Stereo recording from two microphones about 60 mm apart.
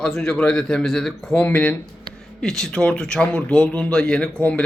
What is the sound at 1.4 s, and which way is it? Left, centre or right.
Speech, left.